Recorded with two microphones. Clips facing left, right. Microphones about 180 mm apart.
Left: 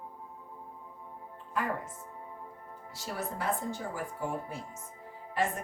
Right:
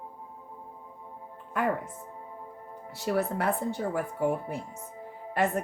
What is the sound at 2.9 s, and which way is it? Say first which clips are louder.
Speech: right 10 dB; 60° right (ahead or behind).